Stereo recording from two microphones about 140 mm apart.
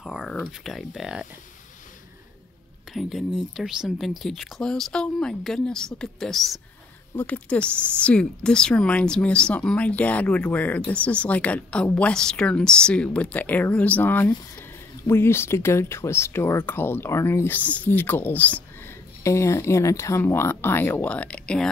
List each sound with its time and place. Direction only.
0.0 s speech: centre (ahead or behind)
2.9 s speech: centre (ahead or behind)